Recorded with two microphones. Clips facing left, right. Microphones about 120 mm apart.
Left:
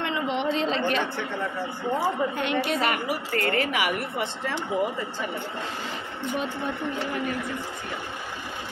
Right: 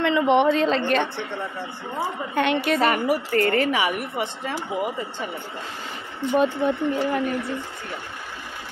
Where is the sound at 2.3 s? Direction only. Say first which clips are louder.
Right 4 dB; 70° right (ahead or behind).